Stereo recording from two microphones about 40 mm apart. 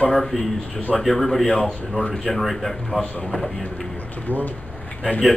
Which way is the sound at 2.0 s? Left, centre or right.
Left.